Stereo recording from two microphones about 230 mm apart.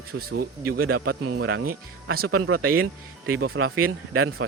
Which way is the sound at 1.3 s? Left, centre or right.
Right.